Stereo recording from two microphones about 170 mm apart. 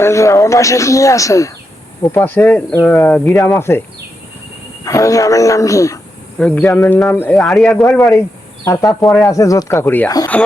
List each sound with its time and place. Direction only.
0.0 s speech: 15° left (ahead or behind)
4.9 s a man's voice: 20° left (ahead or behind)
6.4 s speech: 10° left (ahead or behind)
8.6 s a man's voice: 20° left (ahead or behind)